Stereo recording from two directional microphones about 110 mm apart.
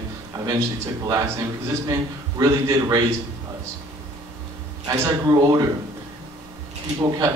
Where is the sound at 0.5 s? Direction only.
30° right (ahead or behind).